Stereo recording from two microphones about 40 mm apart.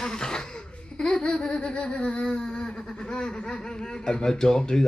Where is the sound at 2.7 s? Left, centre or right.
Centre.